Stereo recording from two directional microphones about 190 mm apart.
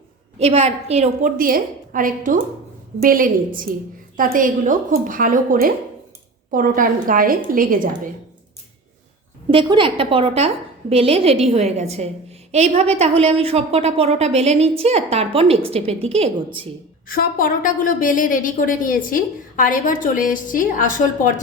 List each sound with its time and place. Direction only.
0.3 s a woman's voice: 35° right (ahead or behind)
1.4 s speech: 50° right (ahead or behind)
9.5 s a woman's voice: 25° right (ahead or behind)
17.1 s a woman's voice: 50° left (ahead or behind)